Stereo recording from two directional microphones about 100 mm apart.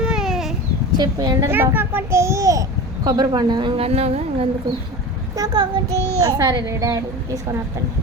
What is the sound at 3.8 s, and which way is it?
Music, 85° right.